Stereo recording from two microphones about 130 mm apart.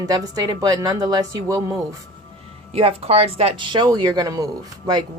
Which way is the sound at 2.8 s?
50° right (ahead or behind).